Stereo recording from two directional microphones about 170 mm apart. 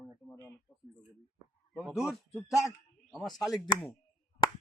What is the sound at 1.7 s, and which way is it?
A man's voice, 5° right (ahead or behind).